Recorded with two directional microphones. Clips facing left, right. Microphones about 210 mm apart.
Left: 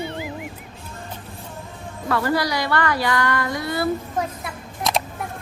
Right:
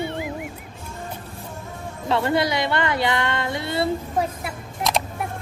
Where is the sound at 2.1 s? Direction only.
25° right (ahead or behind).